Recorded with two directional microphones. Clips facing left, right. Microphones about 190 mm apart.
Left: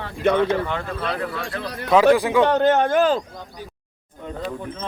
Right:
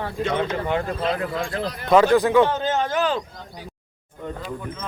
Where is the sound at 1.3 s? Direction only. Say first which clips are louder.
Right 3 dB; 70° left (ahead or behind).